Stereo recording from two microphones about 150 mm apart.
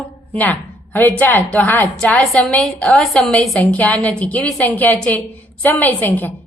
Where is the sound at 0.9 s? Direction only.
10° left (ahead or behind).